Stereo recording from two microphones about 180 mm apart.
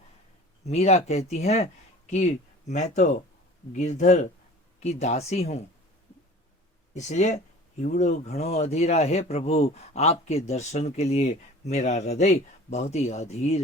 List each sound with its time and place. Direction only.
0.6 s speech: 35° left (ahead or behind)
6.9 s speech: 40° left (ahead or behind)